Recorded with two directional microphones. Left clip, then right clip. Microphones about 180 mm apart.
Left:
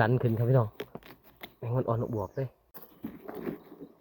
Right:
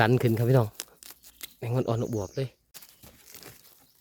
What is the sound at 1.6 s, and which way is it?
Speech, 35° right (ahead or behind).